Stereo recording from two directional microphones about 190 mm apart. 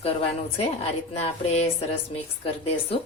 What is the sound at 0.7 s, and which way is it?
Speech, 35° left (ahead or behind).